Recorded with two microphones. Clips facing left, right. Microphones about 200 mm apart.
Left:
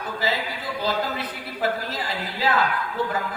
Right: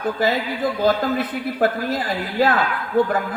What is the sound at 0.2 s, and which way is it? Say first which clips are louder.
A woman's voice: right 6 dB; 50° right (ahead or behind).